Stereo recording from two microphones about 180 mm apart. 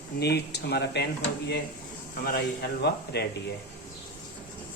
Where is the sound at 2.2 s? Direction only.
60° left (ahead or behind).